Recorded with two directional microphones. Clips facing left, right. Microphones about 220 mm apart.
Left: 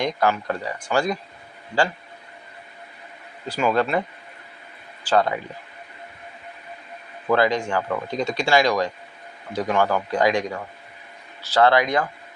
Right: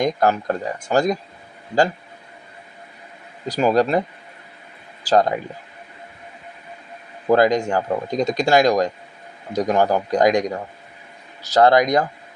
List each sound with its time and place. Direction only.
0.0 s speech: 40° right (ahead or behind)
3.4 s a man's voice: 40° right (ahead or behind)
5.0 s a man's voice: 40° right (ahead or behind)
7.3 s a man's voice: 40° right (ahead or behind)